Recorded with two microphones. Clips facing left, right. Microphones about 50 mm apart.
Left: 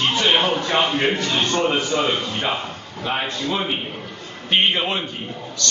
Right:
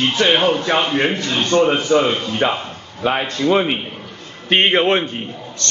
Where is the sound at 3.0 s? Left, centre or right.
Right.